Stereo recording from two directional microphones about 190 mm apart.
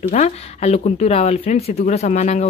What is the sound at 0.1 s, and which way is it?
Speech, 35° left (ahead or behind).